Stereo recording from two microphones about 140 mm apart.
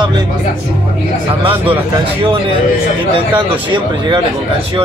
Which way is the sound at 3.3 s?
35° right (ahead or behind).